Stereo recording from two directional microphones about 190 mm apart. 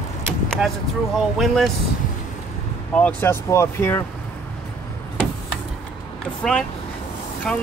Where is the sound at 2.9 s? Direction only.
5° left (ahead or behind).